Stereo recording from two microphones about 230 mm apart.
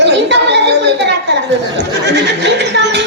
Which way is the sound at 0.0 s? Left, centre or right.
Right.